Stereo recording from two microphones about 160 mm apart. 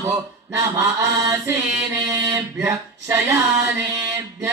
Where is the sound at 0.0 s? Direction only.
20° right (ahead or behind).